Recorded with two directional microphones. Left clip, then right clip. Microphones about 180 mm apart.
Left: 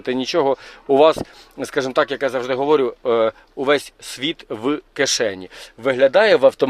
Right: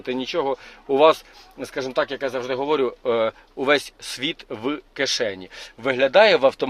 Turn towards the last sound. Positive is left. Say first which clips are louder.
# left 2 dB
turn(degrees=35)  # may be behind; listen again after turning